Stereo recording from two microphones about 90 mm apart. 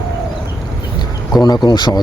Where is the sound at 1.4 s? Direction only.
50° left (ahead or behind).